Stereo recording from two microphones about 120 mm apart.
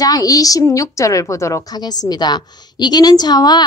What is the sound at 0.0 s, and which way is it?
A woman's voice, 30° left (ahead or behind).